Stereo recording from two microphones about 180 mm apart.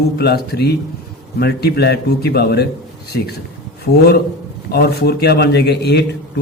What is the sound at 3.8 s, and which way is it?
A man's voice, 60° left (ahead or behind).